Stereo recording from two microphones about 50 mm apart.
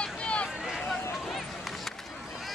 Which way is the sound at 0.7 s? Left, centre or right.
Centre.